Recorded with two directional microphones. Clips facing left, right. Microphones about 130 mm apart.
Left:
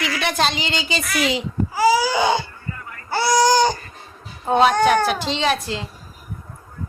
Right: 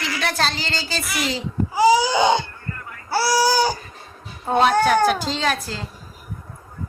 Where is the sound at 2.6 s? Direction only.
Centre (ahead or behind).